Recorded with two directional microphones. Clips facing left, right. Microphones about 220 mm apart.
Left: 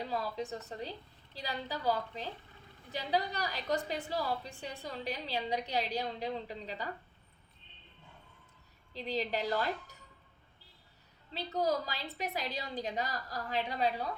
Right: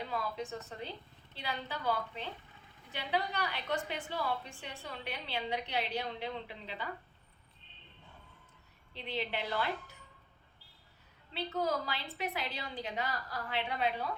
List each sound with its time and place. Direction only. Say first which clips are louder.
0.0 s a woman's voice: left 2 dB; 35° left (ahead or behind)
8.9 s a woman's voice: left 3 dB; 40° left (ahead or behind)
11.3 s a woman's voice: left 2 dB; 35° left (ahead or behind)